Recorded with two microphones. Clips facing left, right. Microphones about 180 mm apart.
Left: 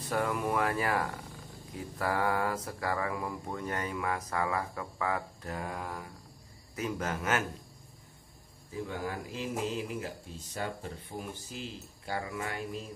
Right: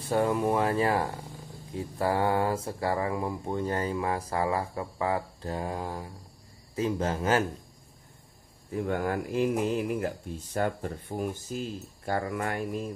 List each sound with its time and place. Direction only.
0.1 s speech: 25° right (ahead or behind)
8.7 s speech: 60° right (ahead or behind)